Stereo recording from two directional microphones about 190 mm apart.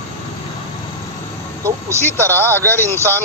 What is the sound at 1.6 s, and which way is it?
Speech, 15° right (ahead or behind).